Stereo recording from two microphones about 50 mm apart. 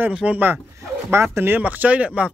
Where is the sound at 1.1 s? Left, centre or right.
Right.